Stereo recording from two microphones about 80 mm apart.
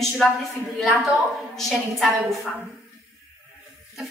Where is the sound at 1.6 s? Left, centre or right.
Centre.